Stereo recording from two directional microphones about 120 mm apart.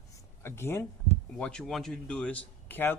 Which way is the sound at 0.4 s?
20° left (ahead or behind).